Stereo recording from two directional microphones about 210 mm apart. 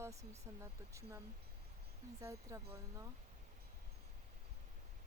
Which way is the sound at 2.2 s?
15° right (ahead or behind).